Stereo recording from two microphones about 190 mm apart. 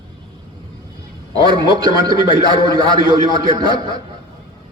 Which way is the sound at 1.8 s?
20° right (ahead or behind).